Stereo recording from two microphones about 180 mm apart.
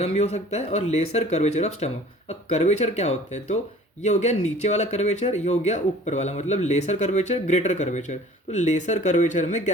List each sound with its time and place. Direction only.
0.0 s speech: 35° left (ahead or behind)